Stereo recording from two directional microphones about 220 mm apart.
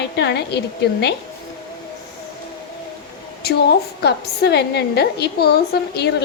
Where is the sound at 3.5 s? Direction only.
50° left (ahead or behind).